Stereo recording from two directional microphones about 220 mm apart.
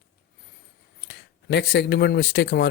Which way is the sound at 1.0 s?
50° left (ahead or behind).